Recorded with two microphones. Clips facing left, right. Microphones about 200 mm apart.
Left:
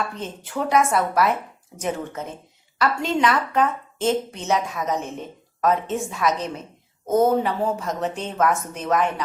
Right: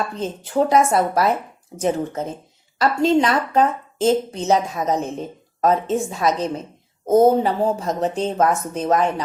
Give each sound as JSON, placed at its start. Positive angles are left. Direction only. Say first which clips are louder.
{"t": 0.2, "sound": "a woman's voice", "louder": "right 7 dB", "side_deg": -35}